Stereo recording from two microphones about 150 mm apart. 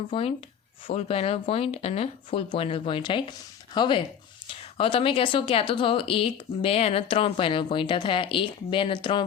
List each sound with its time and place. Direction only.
0.1 s a woman's voice: 35° left (ahead or behind)